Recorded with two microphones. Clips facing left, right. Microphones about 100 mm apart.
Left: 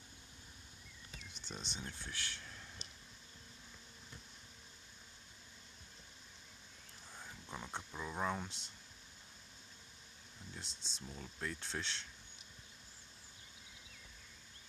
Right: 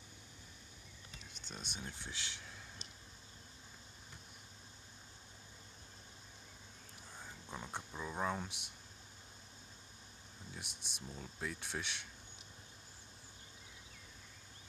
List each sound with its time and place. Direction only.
1.4 s a sound: centre (ahead or behind)
1.7 s speech: 15° right (ahead or behind)
7.2 s speech: 5° right (ahead or behind)
10.5 s speech: 15° right (ahead or behind)